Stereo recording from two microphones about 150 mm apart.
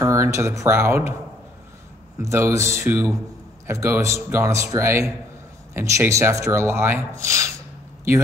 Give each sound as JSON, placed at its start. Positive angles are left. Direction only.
{"t": 0.0, "sound": "speech", "side_deg": -20}
{"t": 2.2, "sound": "speech", "side_deg": -20}